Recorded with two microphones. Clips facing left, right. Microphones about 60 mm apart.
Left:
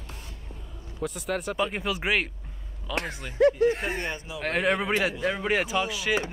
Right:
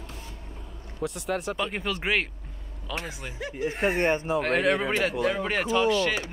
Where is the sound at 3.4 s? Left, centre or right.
Left.